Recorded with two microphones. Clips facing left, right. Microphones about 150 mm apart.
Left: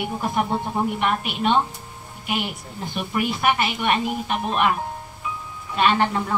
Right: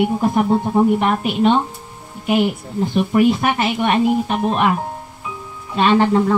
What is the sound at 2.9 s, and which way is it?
Speech, 40° right (ahead or behind).